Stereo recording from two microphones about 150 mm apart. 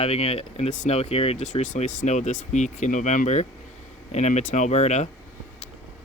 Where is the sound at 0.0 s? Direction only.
45° left (ahead or behind).